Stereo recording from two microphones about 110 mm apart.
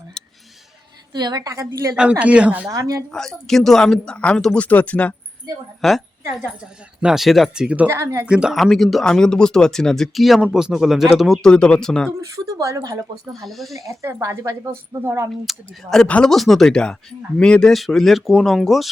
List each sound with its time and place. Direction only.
0.2 s a sound: 5° left (ahead or behind)
1.1 s speech: 40° right (ahead or behind)
2.0 s speech: 10° right (ahead or behind)
2.6 s speech: 30° right (ahead or behind)
3.1 s speech: 5° left (ahead or behind)
6.6 s speech: 5° right (ahead or behind)
7.9 s speech: 25° right (ahead or behind)
8.3 s speech: 5° right (ahead or behind)
12.2 s speech: 30° right (ahead or behind)
13.3 s speech: centre (ahead or behind)
14.0 s speech: 25° right (ahead or behind)
15.4 s speech: centre (ahead or behind)